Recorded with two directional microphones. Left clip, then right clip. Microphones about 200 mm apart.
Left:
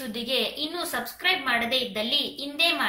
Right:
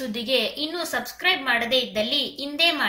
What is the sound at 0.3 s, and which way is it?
A woman's voice, 40° right (ahead or behind).